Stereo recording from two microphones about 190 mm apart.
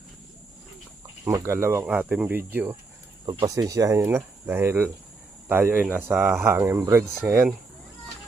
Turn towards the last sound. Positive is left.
turn(degrees=-10)  # may be behind; listen again after turning